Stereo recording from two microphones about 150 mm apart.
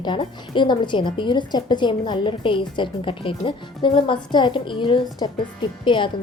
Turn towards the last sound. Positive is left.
turn(degrees=35)  # may be behind; listen again after turning